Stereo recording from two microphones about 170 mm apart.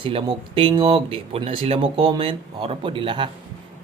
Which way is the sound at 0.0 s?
30° right (ahead or behind).